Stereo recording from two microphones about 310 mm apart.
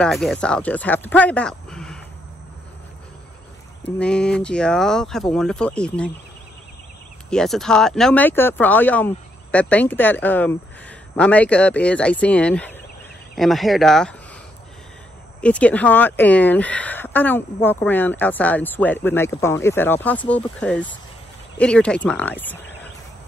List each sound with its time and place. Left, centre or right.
0.0 s speech: centre
3.8 s speech: centre
7.2 s speech: centre
15.4 s speech: centre